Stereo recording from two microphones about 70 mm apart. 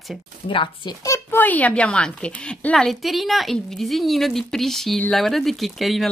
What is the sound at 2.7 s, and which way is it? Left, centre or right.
A woman's voice, centre.